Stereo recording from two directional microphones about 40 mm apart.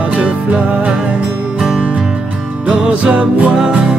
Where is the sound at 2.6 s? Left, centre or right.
Right.